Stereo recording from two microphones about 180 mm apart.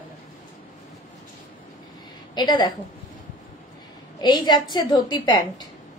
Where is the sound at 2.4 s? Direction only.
25° left (ahead or behind).